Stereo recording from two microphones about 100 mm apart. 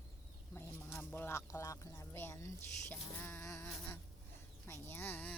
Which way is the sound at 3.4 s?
30° left (ahead or behind).